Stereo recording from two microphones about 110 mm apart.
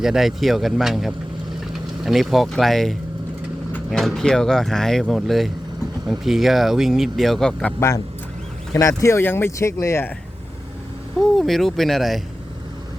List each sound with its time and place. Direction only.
0.0 s speech: 5° right (ahead or behind)
3.9 s speech: 5° left (ahead or behind)
7.8 s speech: 25° left (ahead or behind)
11.2 s speech: centre (ahead or behind)